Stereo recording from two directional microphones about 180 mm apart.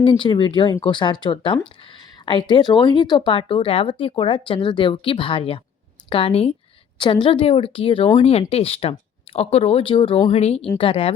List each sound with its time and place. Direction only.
0.0 s speech: 25° left (ahead or behind)